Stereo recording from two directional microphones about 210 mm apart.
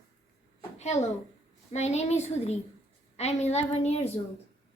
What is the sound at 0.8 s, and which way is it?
A woman's voice, 30° left (ahead or behind).